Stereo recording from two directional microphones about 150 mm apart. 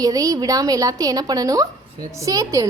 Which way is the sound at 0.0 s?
25° right (ahead or behind).